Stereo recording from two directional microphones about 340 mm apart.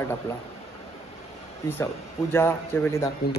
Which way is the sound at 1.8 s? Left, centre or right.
Centre.